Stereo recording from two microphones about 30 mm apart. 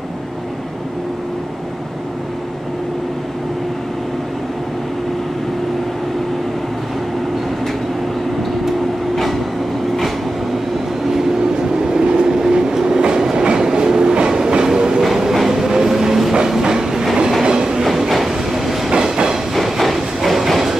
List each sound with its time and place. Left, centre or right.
9.1 s vehicle: centre
11.7 s train: right
17.9 s train: centre